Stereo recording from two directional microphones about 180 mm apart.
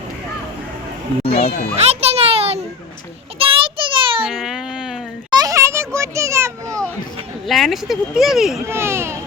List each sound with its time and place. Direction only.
1.2 s speech: 35° left (ahead or behind)
1.9 s music: 35° right (ahead or behind)
3.3 s a sound: 30° right (ahead or behind)
4.3 s baby cry: centre (ahead or behind)
5.3 s children playing: 20° right (ahead or behind)
7.4 s speech: centre (ahead or behind)
8.6 s speech: 15° right (ahead or behind)